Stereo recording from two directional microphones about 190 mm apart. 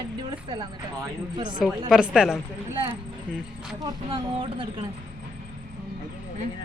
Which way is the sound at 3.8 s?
30° right (ahead or behind).